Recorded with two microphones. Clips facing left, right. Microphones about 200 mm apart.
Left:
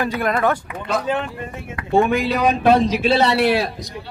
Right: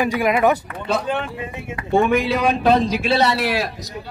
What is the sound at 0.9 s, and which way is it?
A man's voice, centre (ahead or behind).